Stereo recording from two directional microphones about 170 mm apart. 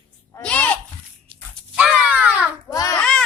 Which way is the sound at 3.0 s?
5° left (ahead or behind).